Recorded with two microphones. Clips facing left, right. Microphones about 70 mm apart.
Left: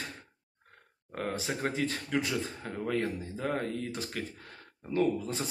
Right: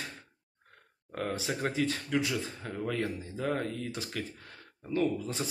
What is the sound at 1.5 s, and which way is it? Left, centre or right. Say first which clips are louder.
Speech: right 1 dB; centre.